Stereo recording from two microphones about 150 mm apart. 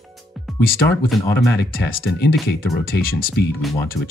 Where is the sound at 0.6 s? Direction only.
80° left.